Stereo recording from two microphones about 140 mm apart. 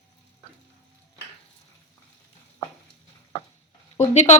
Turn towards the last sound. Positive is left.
turn(degrees=50)  # may be behind; listen again after turning